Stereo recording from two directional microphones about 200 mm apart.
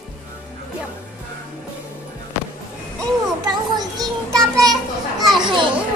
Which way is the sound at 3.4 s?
20° right (ahead or behind).